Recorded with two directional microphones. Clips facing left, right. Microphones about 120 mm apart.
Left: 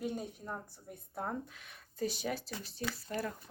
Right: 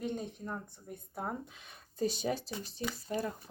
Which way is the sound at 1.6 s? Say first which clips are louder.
Right 3 dB; 25° right (ahead or behind).